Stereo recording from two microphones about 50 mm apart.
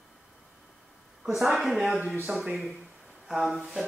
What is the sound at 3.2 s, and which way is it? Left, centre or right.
Speech, centre.